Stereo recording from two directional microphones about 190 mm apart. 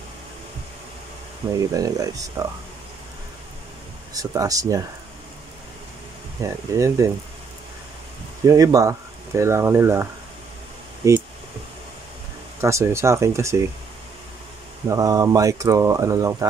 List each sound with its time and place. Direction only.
1.7 s speech: 20° right (ahead or behind)
4.1 s speech: 20° right (ahead or behind)
6.4 s speech: 15° right (ahead or behind)
8.5 s speech: 15° right (ahead or behind)
11.0 s speech: 15° right (ahead or behind)
12.5 s speech: 15° right (ahead or behind)
14.9 s speech: 15° right (ahead or behind)